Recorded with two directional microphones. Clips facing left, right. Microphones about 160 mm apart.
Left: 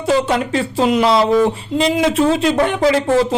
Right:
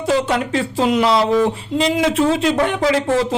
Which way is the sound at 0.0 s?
25° left (ahead or behind).